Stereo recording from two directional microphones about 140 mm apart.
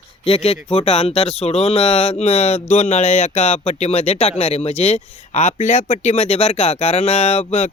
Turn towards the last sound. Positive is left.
turn(degrees=50)  # may be behind; listen again after turning